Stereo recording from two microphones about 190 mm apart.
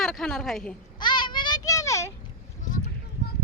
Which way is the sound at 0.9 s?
25° left (ahead or behind).